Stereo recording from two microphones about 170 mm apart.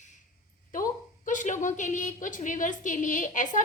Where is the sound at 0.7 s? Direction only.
50° left (ahead or behind).